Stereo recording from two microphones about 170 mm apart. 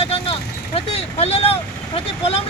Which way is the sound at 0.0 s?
35° left (ahead or behind).